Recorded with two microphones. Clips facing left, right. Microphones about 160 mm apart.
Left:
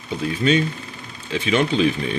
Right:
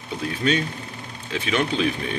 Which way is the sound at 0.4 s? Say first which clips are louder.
Left 4 dB; centre (ahead or behind).